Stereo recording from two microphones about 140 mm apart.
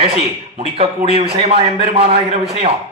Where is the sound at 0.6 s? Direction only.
45° right (ahead or behind).